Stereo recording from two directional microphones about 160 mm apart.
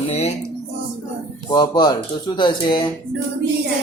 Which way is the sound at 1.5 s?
25° left (ahead or behind).